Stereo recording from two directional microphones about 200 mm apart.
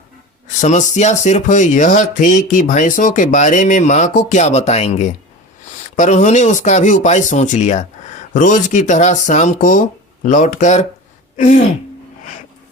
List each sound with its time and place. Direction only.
0.4 s speech: 35° left (ahead or behind)
11.3 s throat clearing: 40° left (ahead or behind)